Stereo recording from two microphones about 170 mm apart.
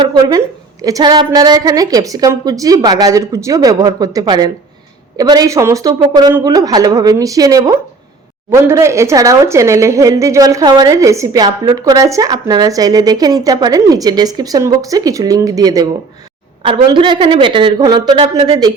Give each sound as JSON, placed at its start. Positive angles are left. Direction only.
{"t": 0.0, "sound": "a woman's voice", "side_deg": -25}